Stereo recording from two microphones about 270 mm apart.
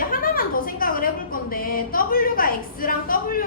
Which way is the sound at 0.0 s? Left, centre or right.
Left.